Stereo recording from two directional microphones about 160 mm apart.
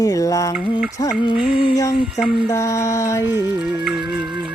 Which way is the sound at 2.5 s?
20° left (ahead or behind).